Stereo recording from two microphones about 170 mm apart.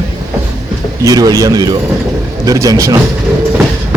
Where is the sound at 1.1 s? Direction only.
20° right (ahead or behind).